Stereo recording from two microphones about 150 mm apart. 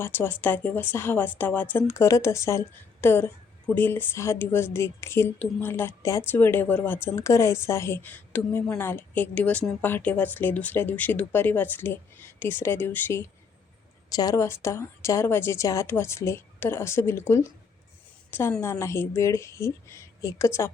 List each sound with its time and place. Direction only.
0.0 s a woman's voice: 15° left (ahead or behind)